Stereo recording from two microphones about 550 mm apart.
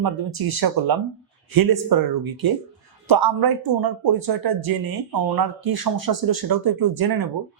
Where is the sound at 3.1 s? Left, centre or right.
Right.